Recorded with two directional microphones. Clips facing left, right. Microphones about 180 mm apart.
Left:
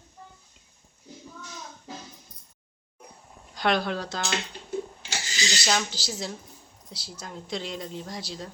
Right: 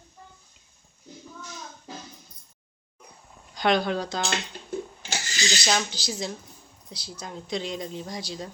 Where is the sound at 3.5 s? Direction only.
Centre (ahead or behind).